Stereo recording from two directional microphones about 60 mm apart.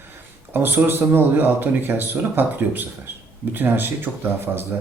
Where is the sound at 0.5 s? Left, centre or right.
Right.